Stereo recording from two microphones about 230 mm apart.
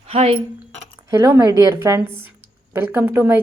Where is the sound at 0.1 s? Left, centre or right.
Right.